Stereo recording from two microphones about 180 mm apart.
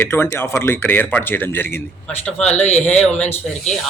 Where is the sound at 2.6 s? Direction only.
40° left (ahead or behind).